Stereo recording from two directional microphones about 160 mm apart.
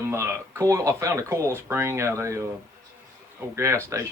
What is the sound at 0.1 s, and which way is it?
Speech, 15° right (ahead or behind).